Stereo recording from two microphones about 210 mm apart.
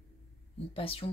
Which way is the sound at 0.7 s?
25° left (ahead or behind).